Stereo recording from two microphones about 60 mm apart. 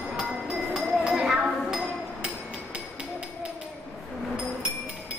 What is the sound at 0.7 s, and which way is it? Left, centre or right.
Chink, centre.